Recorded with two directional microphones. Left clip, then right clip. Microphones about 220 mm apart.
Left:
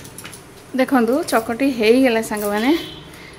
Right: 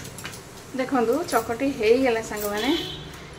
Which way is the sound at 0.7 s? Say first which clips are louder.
Left 6 dB; 40° left (ahead or behind).